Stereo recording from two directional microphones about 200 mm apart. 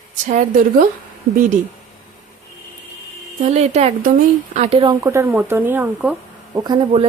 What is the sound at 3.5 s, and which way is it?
Speech, 35° right (ahead or behind).